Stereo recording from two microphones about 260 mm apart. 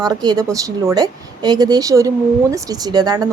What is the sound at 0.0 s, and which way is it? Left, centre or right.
A woman's voice, centre.